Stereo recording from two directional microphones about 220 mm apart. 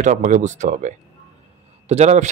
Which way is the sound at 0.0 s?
35° right (ahead or behind).